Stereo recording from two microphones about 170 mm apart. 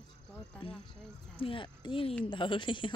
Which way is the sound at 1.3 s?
30° left (ahead or behind).